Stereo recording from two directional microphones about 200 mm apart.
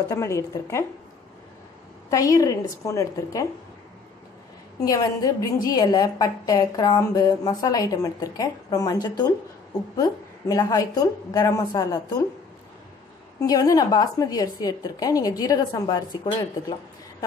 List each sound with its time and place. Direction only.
0.0 s a woman's voice: 15° left (ahead or behind)
2.0 s a woman's voice: 15° left (ahead or behind)
4.8 s a woman's voice: 20° left (ahead or behind)
13.4 s a woman's voice: 20° left (ahead or behind)